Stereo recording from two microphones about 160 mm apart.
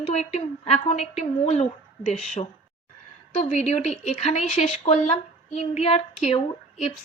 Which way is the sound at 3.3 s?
45° left (ahead or behind).